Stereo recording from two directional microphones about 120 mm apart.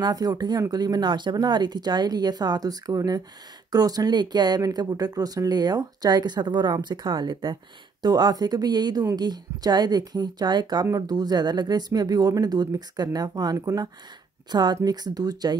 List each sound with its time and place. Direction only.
0.0 s speech: 35° right (ahead or behind)